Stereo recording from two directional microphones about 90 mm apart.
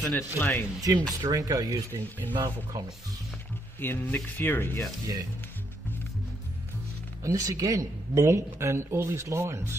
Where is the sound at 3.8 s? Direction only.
20° left (ahead or behind).